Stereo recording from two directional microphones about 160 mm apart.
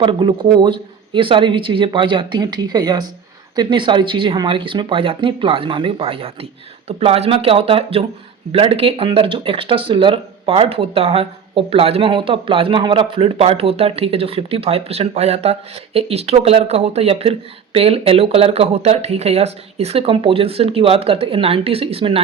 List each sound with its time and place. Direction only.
0.0 s speech: 30° right (ahead or behind)